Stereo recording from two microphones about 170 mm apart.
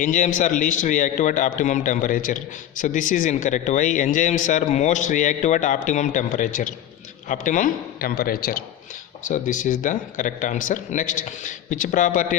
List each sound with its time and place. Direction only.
0.0 s a man's voice: 50° left (ahead or behind)
9.2 s a man's voice: 50° left (ahead or behind)